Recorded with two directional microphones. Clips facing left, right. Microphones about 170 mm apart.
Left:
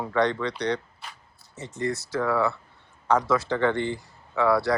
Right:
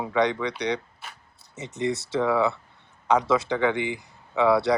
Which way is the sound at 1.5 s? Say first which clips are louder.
Right 2 dB; 20° right (ahead or behind).